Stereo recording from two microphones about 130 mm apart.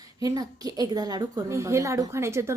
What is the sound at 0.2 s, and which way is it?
Speech, 30° right (ahead or behind).